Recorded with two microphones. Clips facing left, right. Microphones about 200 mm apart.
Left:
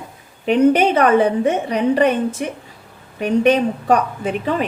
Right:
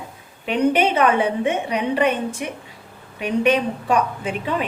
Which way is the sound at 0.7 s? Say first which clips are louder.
Left 4 dB; 40° left (ahead or behind).